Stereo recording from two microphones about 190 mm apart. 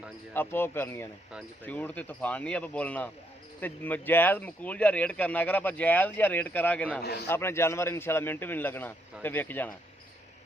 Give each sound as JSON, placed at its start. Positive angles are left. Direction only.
{"t": 0.3, "sound": "speech", "side_deg": 10}
{"t": 7.0, "sound": "a man's voice", "side_deg": 60}
{"t": 7.3, "sound": "speech", "side_deg": 10}